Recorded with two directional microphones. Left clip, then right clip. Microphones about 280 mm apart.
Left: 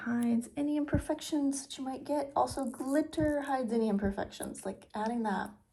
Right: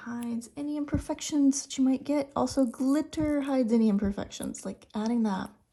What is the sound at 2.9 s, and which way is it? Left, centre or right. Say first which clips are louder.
Speech: right 2 dB; right.